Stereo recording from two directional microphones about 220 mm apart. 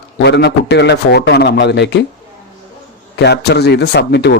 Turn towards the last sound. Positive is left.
turn(degrees=50)  # may be behind; listen again after turning